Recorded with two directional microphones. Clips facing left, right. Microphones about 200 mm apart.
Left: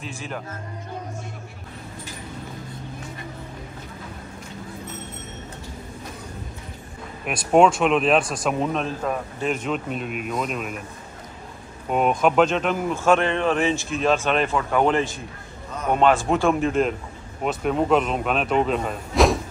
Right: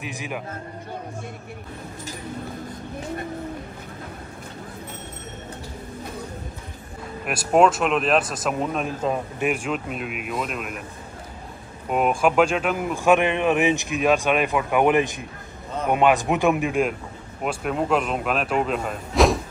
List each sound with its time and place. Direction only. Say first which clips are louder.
0.0 s speech: right 1 dB; 15° right (ahead or behind)
7.2 s speech: left 1 dB; 5° right (ahead or behind)
9.0 s a man's voice: right 2 dB; 20° right (ahead or behind)
9.5 s speech: left 3 dB; 5° right (ahead or behind)
11.9 s speech: left 1 dB; 5° right (ahead or behind)